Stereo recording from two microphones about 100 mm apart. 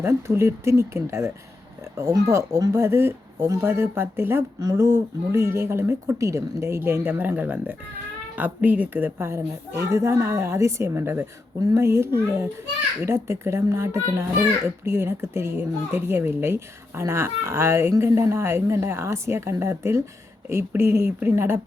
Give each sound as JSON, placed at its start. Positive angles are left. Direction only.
{"t": 0.0, "sound": "speech", "side_deg": -25}